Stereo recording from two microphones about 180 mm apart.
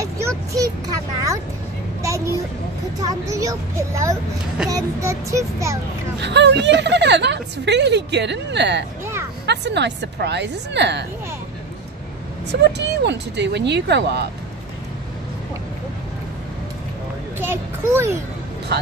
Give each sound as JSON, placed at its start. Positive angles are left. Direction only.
{"t": 0.6, "sound": "a sound", "side_deg": -20}
{"t": 3.0, "sound": "speech", "side_deg": -20}
{"t": 6.1, "sound": "a woman's voice", "side_deg": -75}
{"t": 12.4, "sound": "a woman's voice", "side_deg": -70}
{"t": 17.4, "sound": "a child's voice", "side_deg": -15}